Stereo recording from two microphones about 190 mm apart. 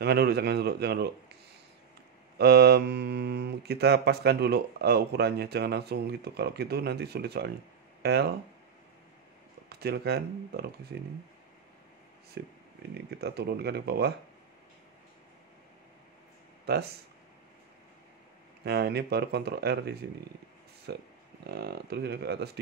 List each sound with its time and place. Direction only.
0.0 s speech: 60° right (ahead or behind)
2.3 s speech: 55° right (ahead or behind)
9.7 s speech: 55° right (ahead or behind)
12.4 s speech: 60° right (ahead or behind)
16.7 s speech: 55° right (ahead or behind)
18.6 s speech: 60° right (ahead or behind)